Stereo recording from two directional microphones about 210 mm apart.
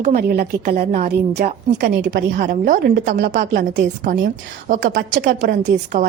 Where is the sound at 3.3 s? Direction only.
55° right (ahead or behind).